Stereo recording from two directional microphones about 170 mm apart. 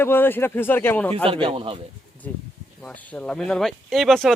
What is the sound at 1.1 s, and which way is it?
Speech, 35° right (ahead or behind).